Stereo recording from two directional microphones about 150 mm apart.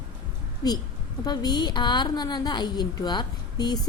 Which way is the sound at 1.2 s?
25° left (ahead or behind).